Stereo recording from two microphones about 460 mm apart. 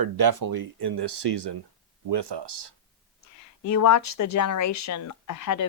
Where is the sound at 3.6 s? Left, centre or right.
Left.